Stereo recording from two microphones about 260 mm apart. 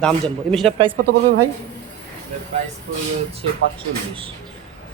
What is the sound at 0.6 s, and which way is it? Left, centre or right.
Speech, centre.